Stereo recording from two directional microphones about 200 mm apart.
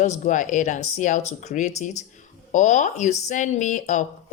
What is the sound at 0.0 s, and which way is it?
Speech, 40° left (ahead or behind).